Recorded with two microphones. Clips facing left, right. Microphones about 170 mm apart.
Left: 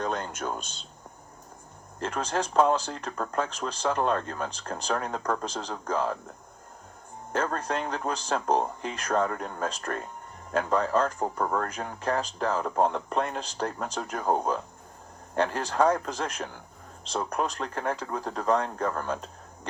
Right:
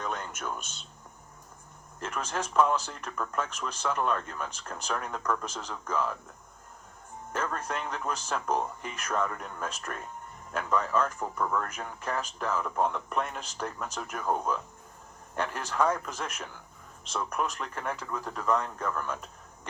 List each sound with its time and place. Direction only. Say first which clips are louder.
0.0 s speech: left 5 dB; 35° left (ahead or behind)
2.0 s speech: left 4 dB; 35° left (ahead or behind)
7.3 s speech: left 5 dB; 35° left (ahead or behind)